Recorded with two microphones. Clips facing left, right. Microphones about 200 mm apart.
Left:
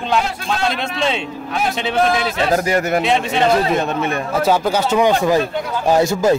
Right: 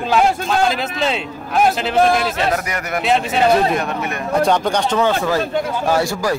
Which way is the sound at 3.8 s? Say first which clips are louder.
Left 3 dB; 25° left (ahead or behind).